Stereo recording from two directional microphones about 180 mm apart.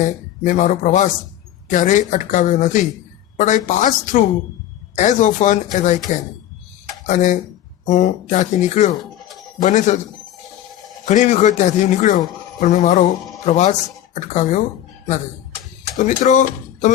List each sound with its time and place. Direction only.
0.0 s speech: 45° left (ahead or behind)
7.1 s speech: 45° left (ahead or behind)
11.0 s speech: 40° left (ahead or behind)
16.0 s speech: 45° left (ahead or behind)